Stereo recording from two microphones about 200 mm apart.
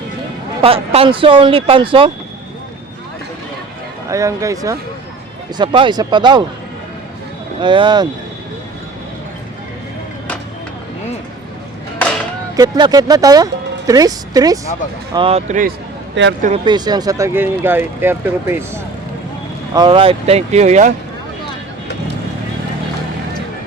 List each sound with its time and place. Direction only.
0.6 s speech: 30° right (ahead or behind)
4.1 s speech: 15° right (ahead or behind)
7.6 s speech: 25° right (ahead or behind)
12.5 s speech: 20° right (ahead or behind)
15.1 s speech: 30° right (ahead or behind)
16.2 s speech: 65° right (ahead or behind)
16.6 s speech: 20° right (ahead or behind)
19.7 s speech: 25° right (ahead or behind)